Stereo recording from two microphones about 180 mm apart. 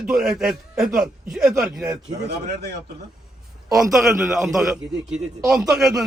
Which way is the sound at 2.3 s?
65° right (ahead or behind).